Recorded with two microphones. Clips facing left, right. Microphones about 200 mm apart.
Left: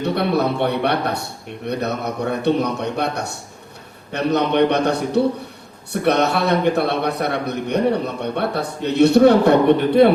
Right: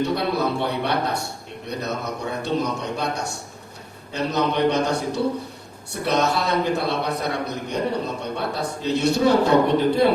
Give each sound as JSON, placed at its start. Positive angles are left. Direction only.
{"t": 0.0, "sound": "a man's voice", "side_deg": 60}